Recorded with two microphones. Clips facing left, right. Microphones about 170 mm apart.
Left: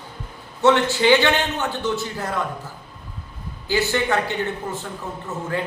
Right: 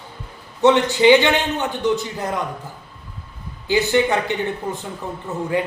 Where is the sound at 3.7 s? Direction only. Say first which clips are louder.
Right 4 dB; 20° right (ahead or behind).